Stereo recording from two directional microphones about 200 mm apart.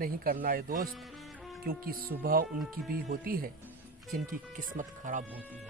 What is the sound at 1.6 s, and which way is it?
Speech, 50° right (ahead or behind).